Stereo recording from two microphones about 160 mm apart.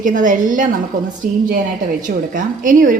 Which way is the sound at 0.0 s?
55° right (ahead or behind).